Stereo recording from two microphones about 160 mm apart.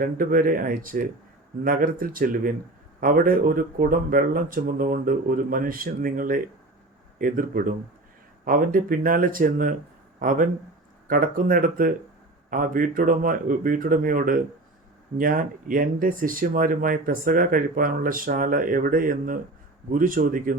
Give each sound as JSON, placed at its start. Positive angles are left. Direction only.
{"t": 0.0, "sound": "speech", "side_deg": -60}